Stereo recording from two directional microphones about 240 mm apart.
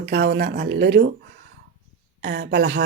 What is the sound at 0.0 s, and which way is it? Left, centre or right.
A woman's voice, right.